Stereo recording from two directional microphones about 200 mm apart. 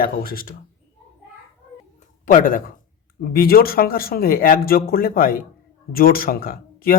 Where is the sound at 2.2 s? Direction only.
45° left (ahead or behind).